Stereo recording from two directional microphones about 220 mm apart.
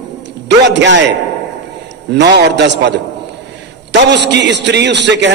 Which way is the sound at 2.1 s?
50° right (ahead or behind).